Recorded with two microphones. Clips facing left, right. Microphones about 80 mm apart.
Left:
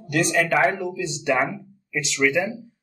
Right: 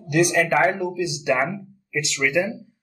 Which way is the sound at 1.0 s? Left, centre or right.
Centre.